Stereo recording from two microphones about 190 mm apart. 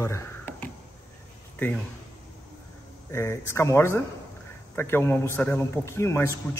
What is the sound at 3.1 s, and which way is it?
A man's voice, 15° left (ahead or behind).